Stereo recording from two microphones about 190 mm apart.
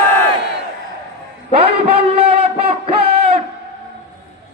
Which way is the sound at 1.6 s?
30° right (ahead or behind).